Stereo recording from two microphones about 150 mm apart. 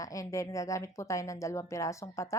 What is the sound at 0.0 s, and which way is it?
A woman's voice, 20° left (ahead or behind).